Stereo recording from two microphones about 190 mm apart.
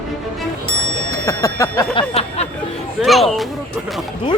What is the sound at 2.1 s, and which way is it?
Speech, 35° left (ahead or behind).